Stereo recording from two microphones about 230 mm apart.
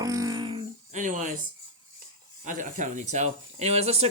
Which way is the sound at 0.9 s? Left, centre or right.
Right.